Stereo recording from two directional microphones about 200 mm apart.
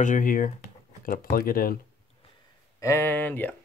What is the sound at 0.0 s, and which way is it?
Speech, 40° left (ahead or behind).